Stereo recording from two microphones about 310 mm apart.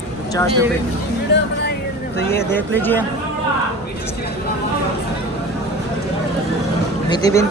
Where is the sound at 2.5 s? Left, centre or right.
Centre.